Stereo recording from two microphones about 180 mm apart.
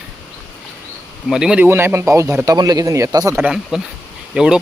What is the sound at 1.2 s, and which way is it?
Speech, 5° right (ahead or behind).